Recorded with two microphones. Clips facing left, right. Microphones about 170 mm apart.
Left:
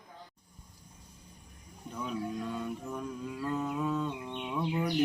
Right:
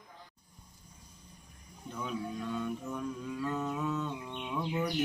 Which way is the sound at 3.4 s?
10° left (ahead or behind).